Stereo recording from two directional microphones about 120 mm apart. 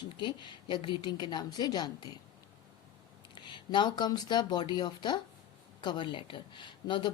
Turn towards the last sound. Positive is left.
turn(degrees=40)  # may be behind; listen again after turning